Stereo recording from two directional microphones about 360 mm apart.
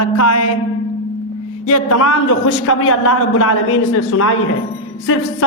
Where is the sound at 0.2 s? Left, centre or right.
Left.